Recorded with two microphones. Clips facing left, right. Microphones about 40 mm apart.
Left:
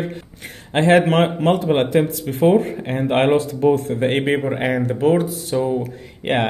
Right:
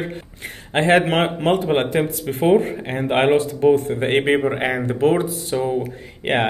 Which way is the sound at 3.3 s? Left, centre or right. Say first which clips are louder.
Right 1 dB; right.